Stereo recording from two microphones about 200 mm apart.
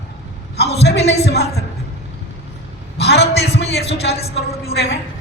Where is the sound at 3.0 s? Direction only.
55° left (ahead or behind).